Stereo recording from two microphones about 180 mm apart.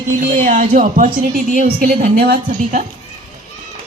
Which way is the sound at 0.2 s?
50° right (ahead or behind).